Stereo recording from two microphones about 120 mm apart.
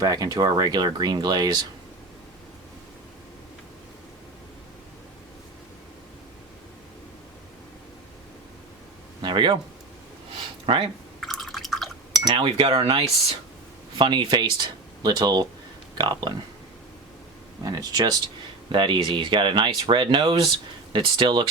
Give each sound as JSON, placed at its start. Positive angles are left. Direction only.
{"t": 0.0, "sound": "speech", "side_deg": -35}
{"t": 9.2, "sound": "a sound", "side_deg": -40}
{"t": 10.7, "sound": "cutlery", "side_deg": -50}
{"t": 11.2, "sound": "drip", "side_deg": 0}
{"t": 12.3, "sound": "cutlery", "side_deg": -50}
{"t": 14.0, "sound": "speech", "side_deg": -40}
{"t": 17.6, "sound": "speech", "side_deg": -30}